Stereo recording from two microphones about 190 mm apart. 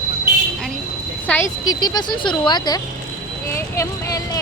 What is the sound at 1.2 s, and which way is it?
Speech, 10° left (ahead or behind).